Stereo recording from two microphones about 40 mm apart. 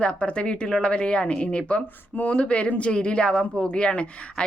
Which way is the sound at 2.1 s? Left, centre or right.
Left.